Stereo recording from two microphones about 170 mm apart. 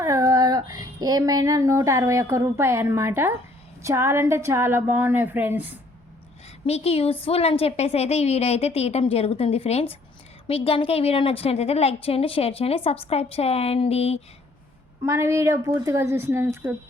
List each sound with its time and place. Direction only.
0.0 s a woman's voice: 20° right (ahead or behind)
6.7 s a woman's voice: 35° left (ahead or behind)
15.0 s a woman's voice: 15° right (ahead or behind)